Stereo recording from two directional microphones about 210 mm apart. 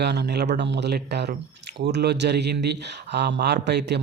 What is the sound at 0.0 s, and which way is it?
Speech, 50° right (ahead or behind).